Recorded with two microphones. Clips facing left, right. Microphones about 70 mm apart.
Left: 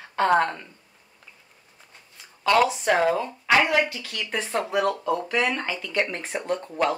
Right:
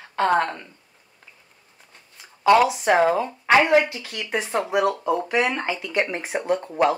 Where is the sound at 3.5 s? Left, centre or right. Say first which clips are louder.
Right 4 dB; right.